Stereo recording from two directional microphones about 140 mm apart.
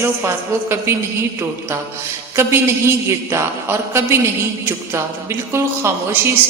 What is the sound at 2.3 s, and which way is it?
A man's voice, 20° right (ahead or behind).